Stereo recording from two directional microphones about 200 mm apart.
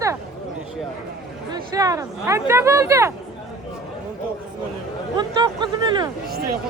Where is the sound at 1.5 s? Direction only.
15° right (ahead or behind).